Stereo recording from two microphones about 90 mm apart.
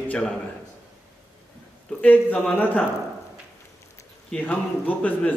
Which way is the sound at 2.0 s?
15° left (ahead or behind).